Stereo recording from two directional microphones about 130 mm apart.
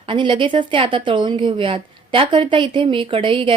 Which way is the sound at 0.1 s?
40° right (ahead or behind).